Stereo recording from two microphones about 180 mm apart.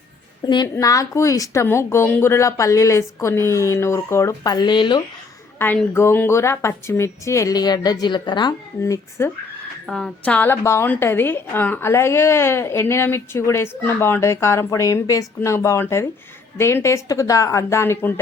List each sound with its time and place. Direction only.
0.4 s a woman's voice: 25° left (ahead or behind)
5.5 s a woman's voice: 10° left (ahead or behind)
9.8 s a woman's voice: 5° left (ahead or behind)